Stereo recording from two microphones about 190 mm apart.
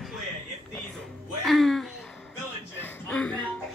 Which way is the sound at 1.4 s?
Centre (ahead or behind).